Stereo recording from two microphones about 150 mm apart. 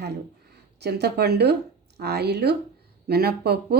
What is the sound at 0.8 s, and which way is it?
Speech, 90° right.